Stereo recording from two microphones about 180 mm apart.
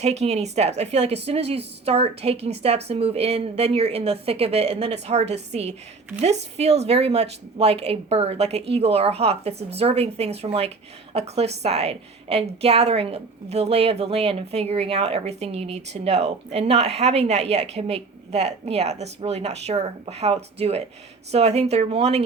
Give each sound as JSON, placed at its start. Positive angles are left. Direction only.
{"t": 0.0, "sound": "a woman's voice", "side_deg": -35}